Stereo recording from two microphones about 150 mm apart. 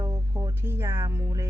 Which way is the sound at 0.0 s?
20° right (ahead or behind).